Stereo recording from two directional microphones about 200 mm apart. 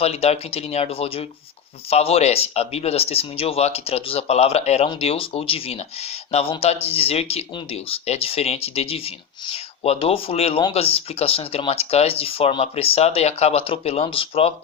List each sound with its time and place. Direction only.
0.0 s speech: 30° left (ahead or behind)